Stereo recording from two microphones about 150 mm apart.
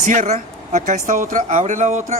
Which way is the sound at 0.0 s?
55° right (ahead or behind).